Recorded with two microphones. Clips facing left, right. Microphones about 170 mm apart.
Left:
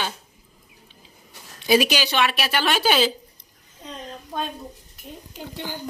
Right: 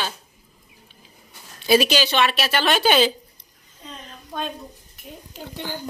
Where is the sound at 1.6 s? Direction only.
15° left (ahead or behind).